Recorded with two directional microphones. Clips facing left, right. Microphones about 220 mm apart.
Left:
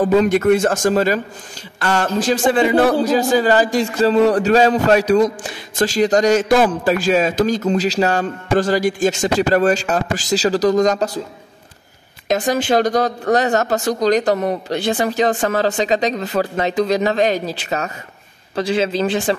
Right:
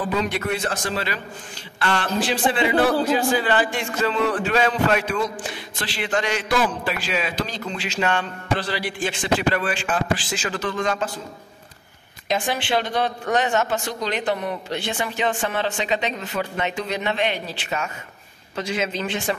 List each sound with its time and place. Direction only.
0.0 s a man's voice: 45° left (ahead or behind)
12.3 s a man's voice: 40° left (ahead or behind)